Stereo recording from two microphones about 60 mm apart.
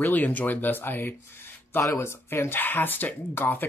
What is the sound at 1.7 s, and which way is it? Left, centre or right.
Speech, left.